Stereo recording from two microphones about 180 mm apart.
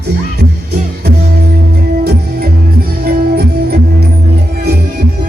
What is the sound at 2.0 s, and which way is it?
Music, 55° right (ahead or behind).